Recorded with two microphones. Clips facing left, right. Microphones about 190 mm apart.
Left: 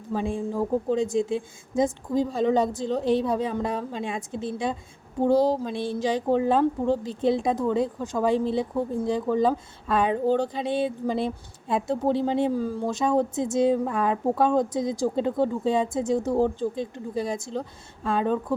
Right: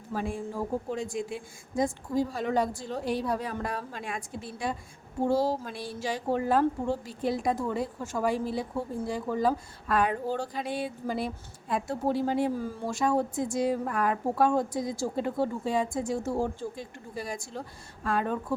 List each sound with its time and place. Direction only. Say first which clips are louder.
0.1 s a woman's voice: left 5 dB; 20° left (ahead or behind)